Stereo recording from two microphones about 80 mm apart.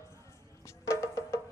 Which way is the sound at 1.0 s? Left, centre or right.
Left.